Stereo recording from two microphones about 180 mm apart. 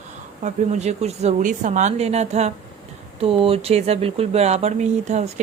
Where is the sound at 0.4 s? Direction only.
40° right (ahead or behind).